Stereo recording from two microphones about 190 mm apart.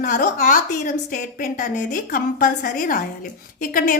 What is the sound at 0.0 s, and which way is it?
A woman's voice, 45° left (ahead or behind).